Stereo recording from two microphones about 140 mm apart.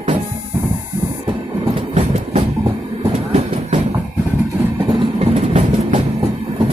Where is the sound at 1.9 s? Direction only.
55° right (ahead or behind).